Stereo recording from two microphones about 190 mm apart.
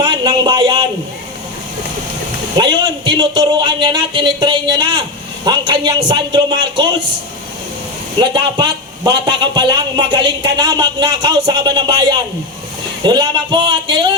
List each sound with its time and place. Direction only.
0.0 s a sound: 25° right (ahead or behind)
2.6 s a man's voice: 25° right (ahead or behind)
8.2 s a man's voice: 25° right (ahead or behind)